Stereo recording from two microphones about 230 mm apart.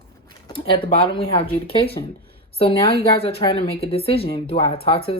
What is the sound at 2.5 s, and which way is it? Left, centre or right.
A woman's voice, left.